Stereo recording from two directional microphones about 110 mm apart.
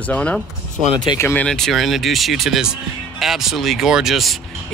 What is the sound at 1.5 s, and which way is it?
Speech, 5° left (ahead or behind).